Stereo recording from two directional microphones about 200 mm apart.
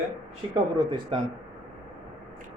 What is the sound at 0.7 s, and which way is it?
Speech, 25° right (ahead or behind).